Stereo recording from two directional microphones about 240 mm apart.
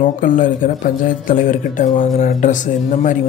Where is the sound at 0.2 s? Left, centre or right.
Left.